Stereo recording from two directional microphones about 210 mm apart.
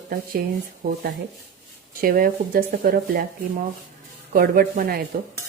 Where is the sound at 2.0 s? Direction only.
45° right (ahead or behind).